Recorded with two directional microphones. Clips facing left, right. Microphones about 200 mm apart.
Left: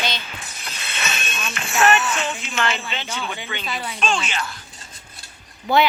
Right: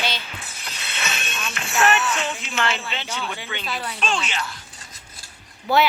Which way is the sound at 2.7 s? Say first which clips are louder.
Left 1 dB; 5° right (ahead or behind).